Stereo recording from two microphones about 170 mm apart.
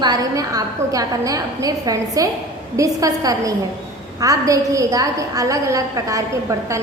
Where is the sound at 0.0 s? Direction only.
20° right (ahead or behind).